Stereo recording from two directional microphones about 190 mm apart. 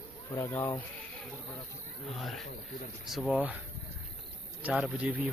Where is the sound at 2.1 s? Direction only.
Centre (ahead or behind).